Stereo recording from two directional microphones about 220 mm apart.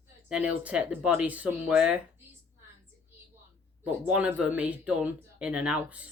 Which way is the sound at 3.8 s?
5° right (ahead or behind).